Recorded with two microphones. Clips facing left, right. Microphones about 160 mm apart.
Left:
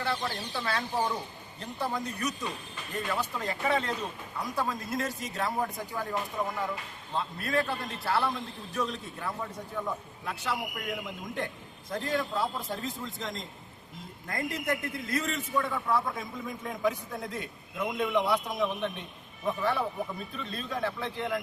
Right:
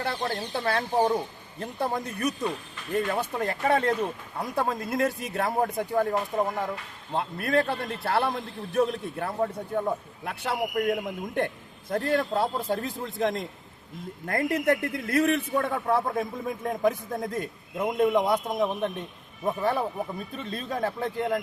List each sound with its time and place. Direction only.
0.0 s a man's voice: 50° right (ahead or behind)
20.3 s a man's voice: 45° right (ahead or behind)